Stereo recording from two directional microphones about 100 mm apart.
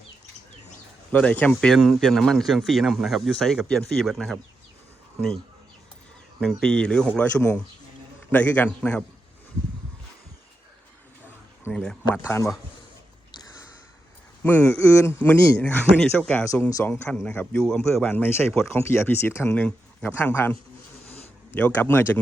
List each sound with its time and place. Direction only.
1.1 s speech: 15° left (ahead or behind)
1.7 s speech: centre (ahead or behind)
6.4 s speech: 10° left (ahead or behind)
11.7 s speech: 10° left (ahead or behind)
12.2 s speech: 25° left (ahead or behind)
14.4 s speech: 15° left (ahead or behind)
16.5 s speech: 35° left (ahead or behind)
16.9 s speech: 5° left (ahead or behind)
18.0 s speech: 20° left (ahead or behind)
19.5 s speech: 10° left (ahead or behind)
21.1 s a sound: 15° left (ahead or behind)